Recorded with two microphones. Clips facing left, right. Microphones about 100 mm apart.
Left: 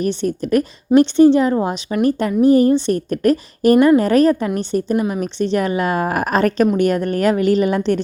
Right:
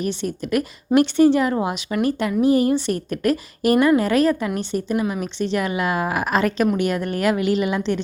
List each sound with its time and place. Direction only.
0.0 s speech: 40° left (ahead or behind)
0.9 s a woman's voice: 25° left (ahead or behind)
5.2 s speech: 40° left (ahead or behind)